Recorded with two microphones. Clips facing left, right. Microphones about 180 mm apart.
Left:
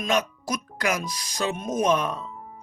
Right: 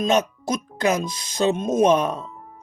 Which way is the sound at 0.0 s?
25° right (ahead or behind).